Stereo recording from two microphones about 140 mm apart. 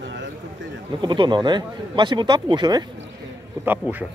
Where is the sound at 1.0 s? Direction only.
35° right (ahead or behind).